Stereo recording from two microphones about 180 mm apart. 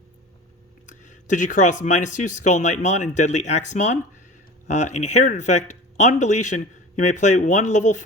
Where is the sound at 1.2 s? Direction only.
45° left (ahead or behind).